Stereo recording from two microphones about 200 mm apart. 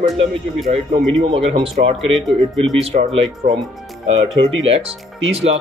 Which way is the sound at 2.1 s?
Centre (ahead or behind).